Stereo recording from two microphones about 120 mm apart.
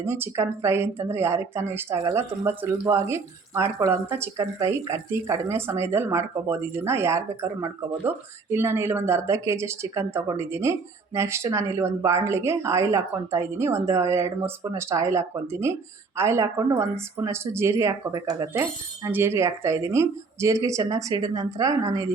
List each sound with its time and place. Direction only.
0.0 s speech: 20° right (ahead or behind)